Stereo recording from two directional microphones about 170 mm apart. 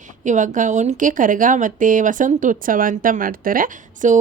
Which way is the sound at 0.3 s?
50° right (ahead or behind).